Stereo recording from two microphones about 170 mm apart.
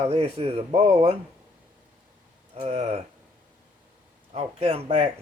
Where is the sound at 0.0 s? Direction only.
35° right (ahead or behind).